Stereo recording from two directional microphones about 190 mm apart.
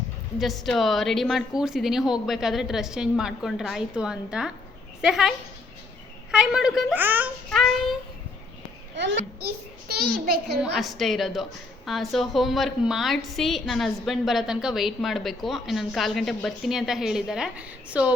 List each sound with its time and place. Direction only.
0.3 s a woman's voice: centre (ahead or behind)
6.3 s a woman's voice: 5° right (ahead or behind)
7.5 s a woman's voice: centre (ahead or behind)
9.0 s a child's voice: 65° right (ahead or behind)
9.9 s a child's voice: 55° right (ahead or behind)
10.6 s a woman's voice: centre (ahead or behind)